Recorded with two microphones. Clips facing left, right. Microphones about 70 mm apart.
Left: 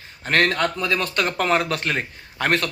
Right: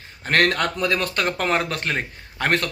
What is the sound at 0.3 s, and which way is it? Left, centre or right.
Speech, right.